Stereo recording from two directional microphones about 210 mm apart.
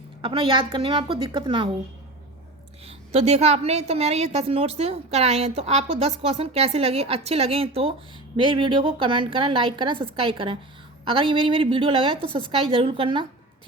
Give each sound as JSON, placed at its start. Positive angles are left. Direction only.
{"t": 0.2, "sound": "a woman's voice", "side_deg": -25}
{"t": 2.8, "sound": "a woman's voice", "side_deg": -30}